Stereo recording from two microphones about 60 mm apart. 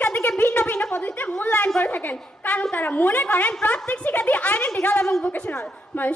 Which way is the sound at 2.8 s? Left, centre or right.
Left.